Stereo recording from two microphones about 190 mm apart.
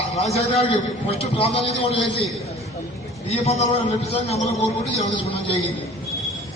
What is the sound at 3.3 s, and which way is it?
A man's voice, 35° left (ahead or behind).